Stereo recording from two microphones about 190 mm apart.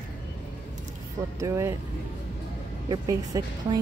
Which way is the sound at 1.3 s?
15° right (ahead or behind).